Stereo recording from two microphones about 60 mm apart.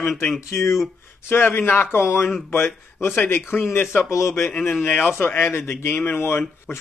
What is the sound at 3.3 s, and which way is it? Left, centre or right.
Speech, left.